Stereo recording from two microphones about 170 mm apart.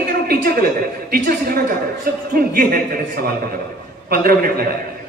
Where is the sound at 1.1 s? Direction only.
65° right (ahead or behind).